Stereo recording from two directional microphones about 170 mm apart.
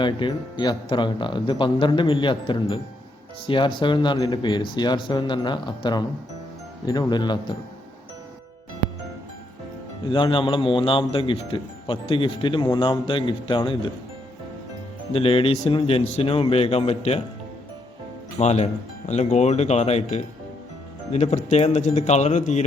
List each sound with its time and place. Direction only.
0.0 s speech: 25° left (ahead or behind)
10.1 s speech: 30° left (ahead or behind)
15.1 s speech: 30° left (ahead or behind)
18.3 s speech: 40° left (ahead or behind)